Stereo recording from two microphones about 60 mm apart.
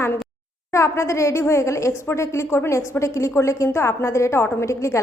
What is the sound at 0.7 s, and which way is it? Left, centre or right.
A woman's voice, left.